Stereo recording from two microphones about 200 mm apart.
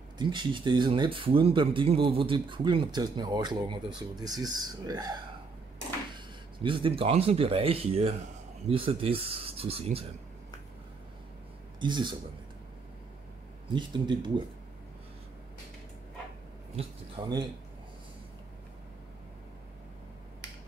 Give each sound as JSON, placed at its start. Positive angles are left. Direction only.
{"t": 0.2, "sound": "speech", "side_deg": -25}
{"t": 11.8, "sound": "speech", "side_deg": -25}
{"t": 13.7, "sound": "speech", "side_deg": -25}
{"t": 17.2, "sound": "speech", "side_deg": -25}